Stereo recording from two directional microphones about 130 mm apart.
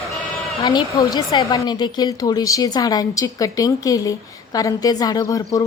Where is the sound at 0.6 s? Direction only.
30° left (ahead or behind).